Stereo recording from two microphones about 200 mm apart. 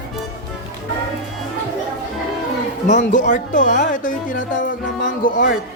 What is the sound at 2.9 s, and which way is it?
Speech, 40° left (ahead or behind).